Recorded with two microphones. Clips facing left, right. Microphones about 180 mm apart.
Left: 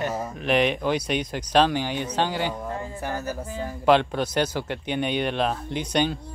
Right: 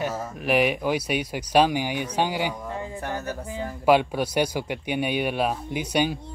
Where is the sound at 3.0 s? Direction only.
5° left (ahead or behind).